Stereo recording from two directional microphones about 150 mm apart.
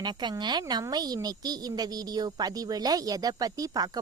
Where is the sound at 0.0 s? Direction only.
30° right (ahead or behind).